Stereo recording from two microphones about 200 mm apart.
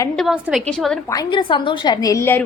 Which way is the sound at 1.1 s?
20° left (ahead or behind).